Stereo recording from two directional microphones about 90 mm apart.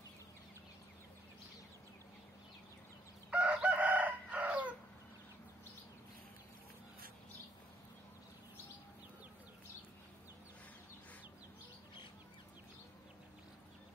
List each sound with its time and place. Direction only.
3.3 s chicken: 15° right (ahead or behind)